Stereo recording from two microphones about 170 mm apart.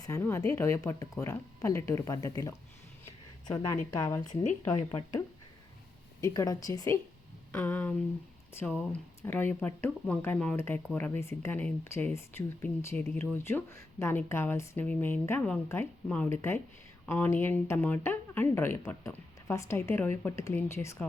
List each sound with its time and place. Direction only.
0.0 s speech: 15° left (ahead or behind)